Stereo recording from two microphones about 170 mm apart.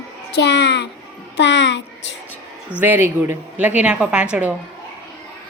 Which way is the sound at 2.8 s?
10° right (ahead or behind).